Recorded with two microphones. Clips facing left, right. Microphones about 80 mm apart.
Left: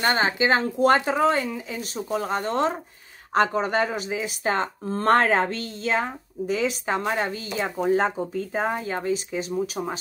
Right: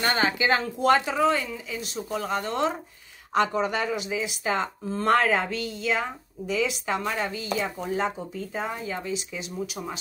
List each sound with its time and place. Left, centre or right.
0.0 s speech: left
0.7 s speech: left